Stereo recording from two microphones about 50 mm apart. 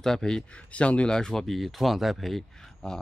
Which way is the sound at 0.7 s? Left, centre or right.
Left.